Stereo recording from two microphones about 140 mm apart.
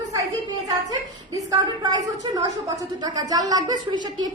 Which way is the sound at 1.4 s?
25° right (ahead or behind).